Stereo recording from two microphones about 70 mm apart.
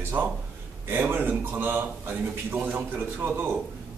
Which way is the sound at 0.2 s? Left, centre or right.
Right.